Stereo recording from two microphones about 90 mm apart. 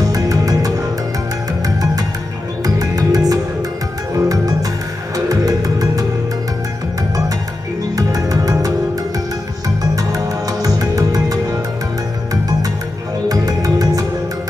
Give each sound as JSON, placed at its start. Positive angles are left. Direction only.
{"t": 0.0, "sound": "music", "side_deg": -40}
{"t": 2.6, "sound": "music", "side_deg": -40}
{"t": 7.9, "sound": "music", "side_deg": -40}
{"t": 9.9, "sound": "music", "side_deg": -40}
{"t": 13.3, "sound": "music", "side_deg": -45}